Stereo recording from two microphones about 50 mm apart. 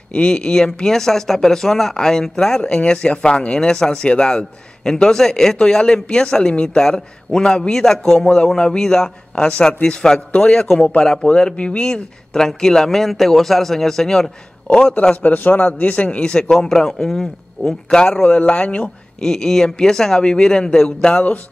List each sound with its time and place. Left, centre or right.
0.1 s speech: centre
15.2 s a man's voice: left
16.3 s speech: centre
18.2 s speech: left
19.3 s speech: centre